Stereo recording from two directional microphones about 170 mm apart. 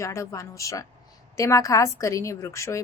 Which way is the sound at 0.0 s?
15° left (ahead or behind).